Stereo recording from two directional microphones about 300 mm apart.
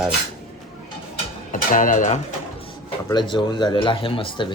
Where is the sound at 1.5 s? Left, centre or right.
Left.